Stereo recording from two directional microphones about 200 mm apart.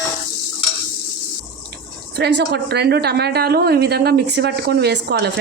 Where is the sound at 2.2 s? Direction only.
55° right (ahead or behind).